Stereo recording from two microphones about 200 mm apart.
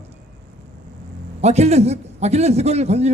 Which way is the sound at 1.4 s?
35° right (ahead or behind).